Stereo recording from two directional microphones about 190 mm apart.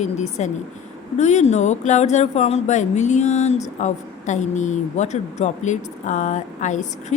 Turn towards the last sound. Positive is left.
turn(degrees=40)  # may be behind; listen again after turning